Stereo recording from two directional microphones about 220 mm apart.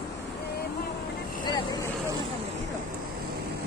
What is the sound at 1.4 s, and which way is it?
Vehicle, 20° left (ahead or behind).